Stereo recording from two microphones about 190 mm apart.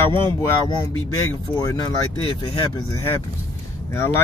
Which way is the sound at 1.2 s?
15° left (ahead or behind).